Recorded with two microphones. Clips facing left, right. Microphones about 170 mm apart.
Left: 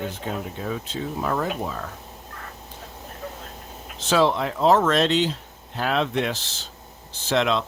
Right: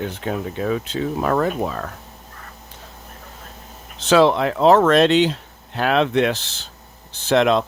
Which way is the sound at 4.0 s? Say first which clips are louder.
Right 6 dB; 75° right (ahead or behind).